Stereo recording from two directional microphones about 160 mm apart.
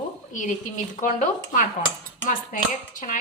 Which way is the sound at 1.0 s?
55° left (ahead or behind).